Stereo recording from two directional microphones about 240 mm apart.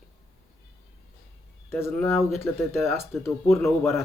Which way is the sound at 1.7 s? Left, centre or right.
Centre.